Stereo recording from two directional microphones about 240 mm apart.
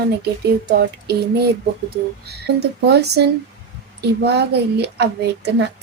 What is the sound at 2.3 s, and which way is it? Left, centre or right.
A woman's voice, right.